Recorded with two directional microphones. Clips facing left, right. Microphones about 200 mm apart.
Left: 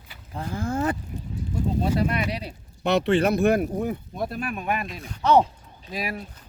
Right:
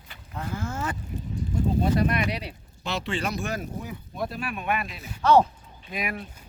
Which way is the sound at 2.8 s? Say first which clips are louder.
Left 9 dB; 60° left (ahead or behind).